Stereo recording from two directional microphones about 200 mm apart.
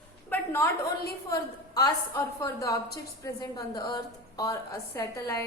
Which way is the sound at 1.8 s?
15° left (ahead or behind).